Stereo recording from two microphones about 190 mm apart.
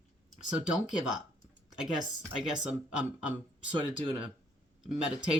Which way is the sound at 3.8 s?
25° right (ahead or behind).